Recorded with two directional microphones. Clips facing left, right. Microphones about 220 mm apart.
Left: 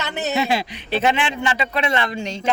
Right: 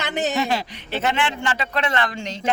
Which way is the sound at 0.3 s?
10° left (ahead or behind).